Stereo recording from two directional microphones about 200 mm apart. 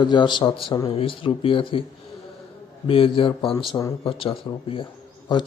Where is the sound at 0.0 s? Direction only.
20° left (ahead or behind).